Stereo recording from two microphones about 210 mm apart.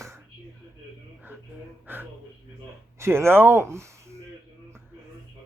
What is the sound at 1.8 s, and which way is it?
Gasp, 10° right (ahead or behind).